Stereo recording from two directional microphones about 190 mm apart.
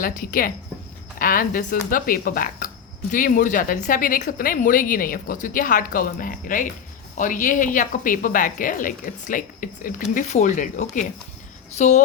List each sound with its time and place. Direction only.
0.0 s speech: 45° left (ahead or behind)